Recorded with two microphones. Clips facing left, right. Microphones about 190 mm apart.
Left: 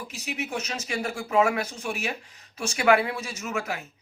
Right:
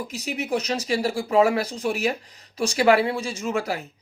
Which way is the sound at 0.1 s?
40° right (ahead or behind).